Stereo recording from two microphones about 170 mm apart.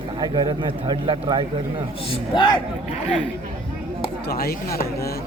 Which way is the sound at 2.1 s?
25° left (ahead or behind).